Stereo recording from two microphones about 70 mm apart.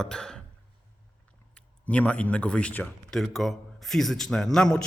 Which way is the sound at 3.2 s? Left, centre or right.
Centre.